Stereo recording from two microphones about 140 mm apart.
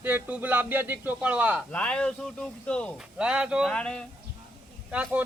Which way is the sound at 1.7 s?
10° left (ahead or behind).